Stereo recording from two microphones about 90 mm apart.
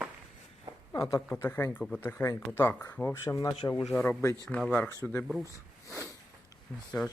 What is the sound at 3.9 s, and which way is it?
Speech, 15° left (ahead or behind).